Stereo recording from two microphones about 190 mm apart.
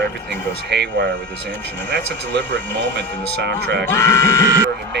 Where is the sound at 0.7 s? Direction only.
65° right (ahead or behind).